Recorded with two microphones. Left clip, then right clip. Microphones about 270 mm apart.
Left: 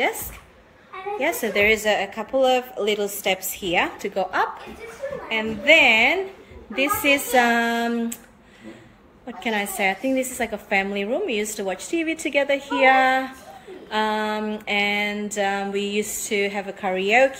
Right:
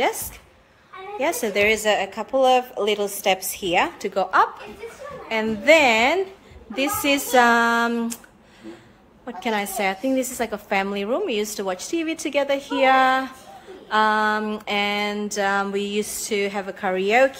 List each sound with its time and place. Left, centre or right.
1.2 s a woman's voice: centre
9.4 s a woman's voice: centre